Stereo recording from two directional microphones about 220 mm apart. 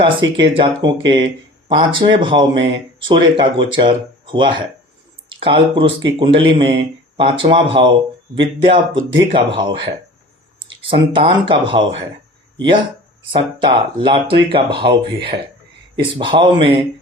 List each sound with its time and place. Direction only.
0.0 s speech: 20° right (ahead or behind)
13.3 s speech: 20° right (ahead or behind)